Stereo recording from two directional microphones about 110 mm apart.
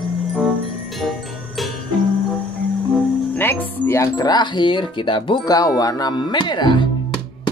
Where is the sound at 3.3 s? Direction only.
15° left (ahead or behind); by 5.3 s 50° left (ahead or behind).